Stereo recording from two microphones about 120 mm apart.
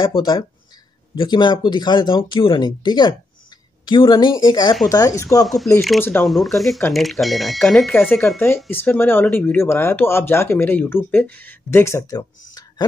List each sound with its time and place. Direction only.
0.0 s speech: 40° left (ahead or behind)
5.4 s speech: centre (ahead or behind)
5.9 s speech: 15° left (ahead or behind)
6.2 s speech: centre (ahead or behind)
7.9 s speech: 20° left (ahead or behind)